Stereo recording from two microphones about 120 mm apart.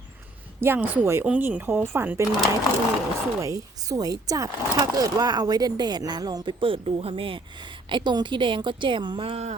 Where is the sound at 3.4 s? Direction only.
30° right (ahead or behind).